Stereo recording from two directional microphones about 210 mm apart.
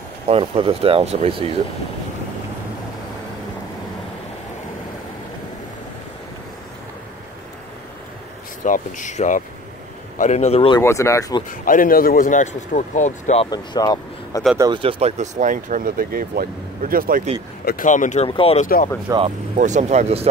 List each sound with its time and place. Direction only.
0.3 s speech: 25° right (ahead or behind)
8.6 s speech: 40° left (ahead or behind)
10.8 s speech: 15° left (ahead or behind)
11.6 s speech: 40° left (ahead or behind)
13.5 s speech: 20° left (ahead or behind)
14.6 s speech: 25° right (ahead or behind); by 17.2 s 45° right (ahead or behind)
17.6 s speech: 40° left (ahead or behind)
19.0 s speech: 25° right (ahead or behind)
19.5 s speech: 35° right (ahead or behind)